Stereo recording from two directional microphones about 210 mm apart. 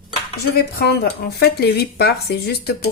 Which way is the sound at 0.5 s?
50° left (ahead or behind).